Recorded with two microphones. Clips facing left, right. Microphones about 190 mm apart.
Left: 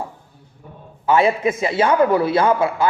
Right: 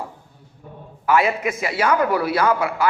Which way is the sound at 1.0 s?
25° left (ahead or behind).